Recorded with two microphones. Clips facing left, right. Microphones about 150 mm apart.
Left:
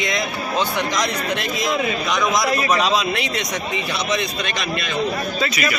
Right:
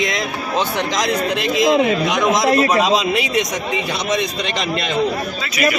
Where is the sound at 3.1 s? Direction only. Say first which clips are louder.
Right 6 dB; 15° right (ahead or behind).